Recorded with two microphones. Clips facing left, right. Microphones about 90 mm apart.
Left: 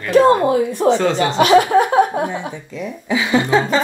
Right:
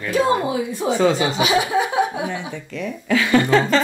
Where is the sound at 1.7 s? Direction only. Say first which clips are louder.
Left 6 dB; 50° left (ahead or behind).